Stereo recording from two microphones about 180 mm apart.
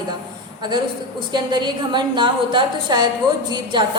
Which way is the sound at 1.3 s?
25° right (ahead or behind).